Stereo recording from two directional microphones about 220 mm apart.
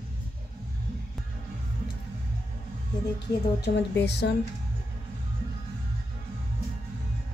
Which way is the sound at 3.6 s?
50° left (ahead or behind).